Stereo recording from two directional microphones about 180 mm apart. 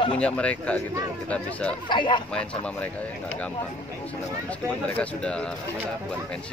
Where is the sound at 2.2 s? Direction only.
5° left (ahead or behind).